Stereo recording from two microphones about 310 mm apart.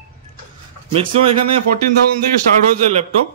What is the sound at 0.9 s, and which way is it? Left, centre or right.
Speech, centre.